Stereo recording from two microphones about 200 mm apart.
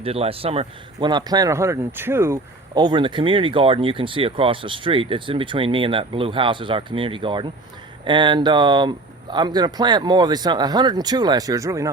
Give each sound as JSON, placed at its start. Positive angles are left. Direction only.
{"t": 0.0, "sound": "speech", "side_deg": -30}